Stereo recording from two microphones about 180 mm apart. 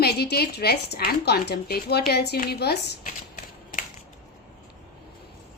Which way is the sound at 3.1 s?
50° left (ahead or behind).